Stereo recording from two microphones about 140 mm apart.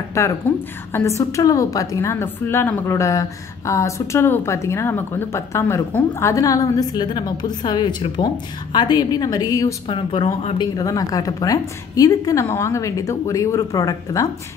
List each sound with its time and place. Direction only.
0.2 s a woman's voice: 20° left (ahead or behind)